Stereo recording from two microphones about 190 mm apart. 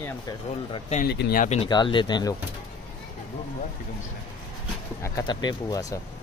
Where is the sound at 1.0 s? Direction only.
55° left (ahead or behind); by 1.7 s 40° left (ahead or behind).